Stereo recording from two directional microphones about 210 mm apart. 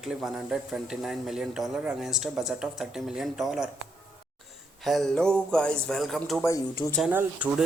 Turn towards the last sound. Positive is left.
turn(degrees=-5)  # may be behind; listen again after turning